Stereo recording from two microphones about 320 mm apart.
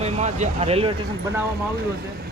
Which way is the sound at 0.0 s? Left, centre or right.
Right.